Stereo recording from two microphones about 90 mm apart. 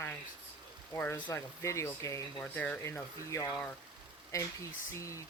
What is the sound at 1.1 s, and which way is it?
Speech, 35° left (ahead or behind).